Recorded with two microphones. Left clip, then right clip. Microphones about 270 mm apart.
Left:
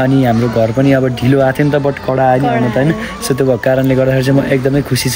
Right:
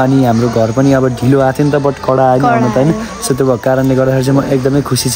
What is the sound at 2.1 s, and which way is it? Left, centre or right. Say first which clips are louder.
Speech: right 2 dB; right.